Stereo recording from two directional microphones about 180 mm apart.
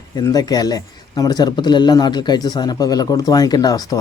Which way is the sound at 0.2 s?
20° left (ahead or behind).